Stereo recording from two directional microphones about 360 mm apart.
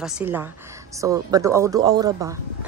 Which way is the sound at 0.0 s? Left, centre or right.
Centre.